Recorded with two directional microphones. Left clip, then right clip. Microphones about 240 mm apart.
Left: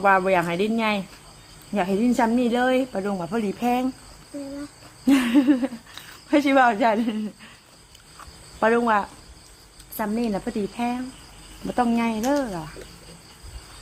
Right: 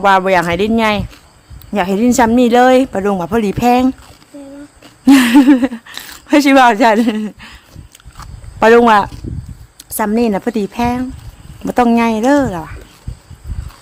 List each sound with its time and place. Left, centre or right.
0.0 s a woman's voice: right
5.0 s speech: right
8.6 s speech: right